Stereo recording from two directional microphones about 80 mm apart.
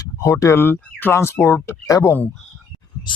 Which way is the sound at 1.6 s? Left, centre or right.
Left.